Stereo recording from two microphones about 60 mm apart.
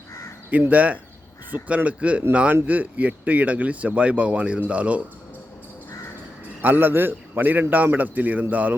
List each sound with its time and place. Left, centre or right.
0.7 s speech: right
6.6 s a man's voice: right